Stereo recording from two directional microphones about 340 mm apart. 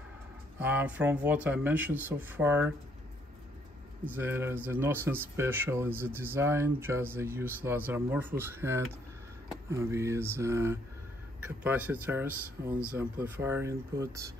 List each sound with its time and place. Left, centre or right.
0.6 s speech: centre
4.0 s speech: centre